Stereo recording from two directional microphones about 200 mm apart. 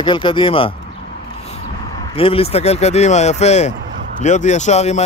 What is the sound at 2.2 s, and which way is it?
Speech, 30° left (ahead or behind).